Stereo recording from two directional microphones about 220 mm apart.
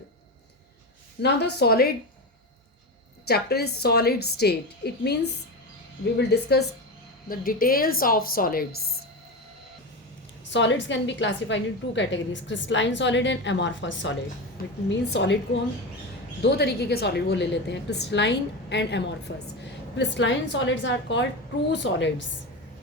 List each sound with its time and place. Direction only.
1.2 s a woman's voice: 50° left (ahead or behind)
3.2 s a woman's voice: 45° left (ahead or behind)
10.5 s a woman's voice: 55° left (ahead or behind)
16.4 s a woman's voice: 50° left (ahead or behind)